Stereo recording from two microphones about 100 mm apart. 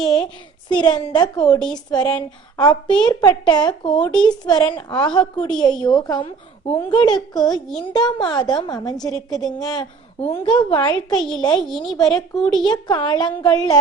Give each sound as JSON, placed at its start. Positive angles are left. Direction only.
{"t": 0.7, "sound": "a woman's voice", "side_deg": 50}
{"t": 1.5, "sound": "speech", "side_deg": 5}
{"t": 1.9, "sound": "a woman's voice", "side_deg": 45}
{"t": 3.9, "sound": "speech", "side_deg": 10}
{"t": 4.2, "sound": "a woman's voice", "side_deg": 50}
{"t": 11.1, "sound": "speech", "side_deg": 5}
{"t": 11.3, "sound": "a woman's voice", "side_deg": 45}
{"t": 11.6, "sound": "speech", "side_deg": 5}
{"t": 12.5, "sound": "a woman's voice", "side_deg": 50}